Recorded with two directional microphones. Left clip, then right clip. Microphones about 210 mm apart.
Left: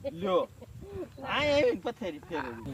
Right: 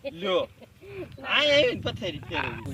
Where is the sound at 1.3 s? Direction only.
25° left (ahead or behind).